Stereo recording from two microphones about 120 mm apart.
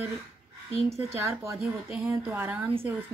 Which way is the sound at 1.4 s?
25° right (ahead or behind).